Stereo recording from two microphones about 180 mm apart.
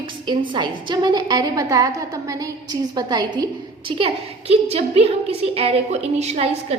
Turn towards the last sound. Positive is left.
turn(degrees=-35)  # may be behind; listen again after turning